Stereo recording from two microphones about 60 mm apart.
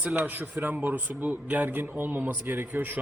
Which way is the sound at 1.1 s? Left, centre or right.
Right.